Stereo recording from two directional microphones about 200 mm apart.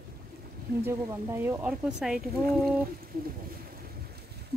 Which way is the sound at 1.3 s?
10° right (ahead or behind).